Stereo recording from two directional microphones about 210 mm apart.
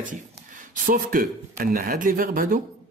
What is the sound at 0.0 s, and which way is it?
Speech, 40° right (ahead or behind).